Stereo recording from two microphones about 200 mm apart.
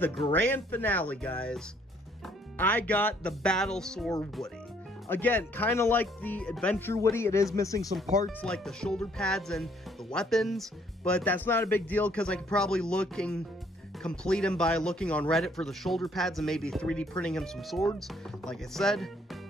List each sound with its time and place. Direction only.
0.0 s a man's voice: 5° left (ahead or behind)
8.5 s a man's voice: 5° left (ahead or behind)